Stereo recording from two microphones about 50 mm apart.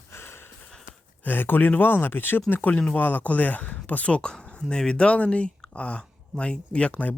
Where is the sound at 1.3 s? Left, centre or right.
Left.